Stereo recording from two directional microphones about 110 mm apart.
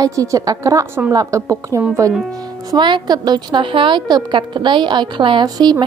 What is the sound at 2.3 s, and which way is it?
Speech, 40° right (ahead or behind).